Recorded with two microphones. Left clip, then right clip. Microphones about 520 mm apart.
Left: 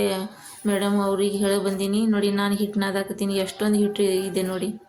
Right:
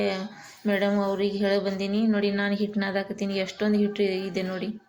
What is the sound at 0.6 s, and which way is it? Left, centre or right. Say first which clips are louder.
Speech: left 1 dB; left.